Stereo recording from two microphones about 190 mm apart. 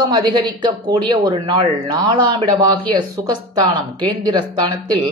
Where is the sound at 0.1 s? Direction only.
25° right (ahead or behind).